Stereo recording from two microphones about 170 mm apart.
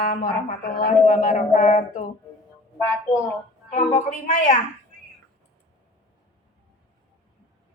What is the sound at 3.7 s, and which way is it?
Speech, 45° left (ahead or behind).